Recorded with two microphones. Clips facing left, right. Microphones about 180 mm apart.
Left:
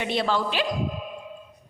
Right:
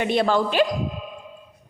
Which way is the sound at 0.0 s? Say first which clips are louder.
Right 5 dB; 50° right (ahead or behind).